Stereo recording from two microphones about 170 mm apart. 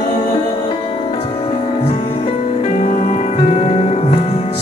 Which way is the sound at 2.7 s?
50° left (ahead or behind).